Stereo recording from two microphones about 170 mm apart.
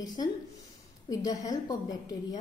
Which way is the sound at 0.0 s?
25° left (ahead or behind).